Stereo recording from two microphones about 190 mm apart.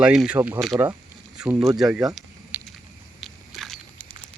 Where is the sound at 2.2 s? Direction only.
Centre (ahead or behind).